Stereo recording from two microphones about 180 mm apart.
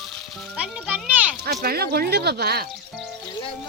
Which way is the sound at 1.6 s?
60° right (ahead or behind).